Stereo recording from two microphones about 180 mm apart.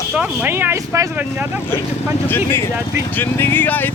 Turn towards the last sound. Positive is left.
turn(degrees=10)  # may be behind; listen again after turning